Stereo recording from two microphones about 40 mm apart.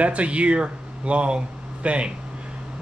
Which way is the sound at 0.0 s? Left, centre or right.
Right.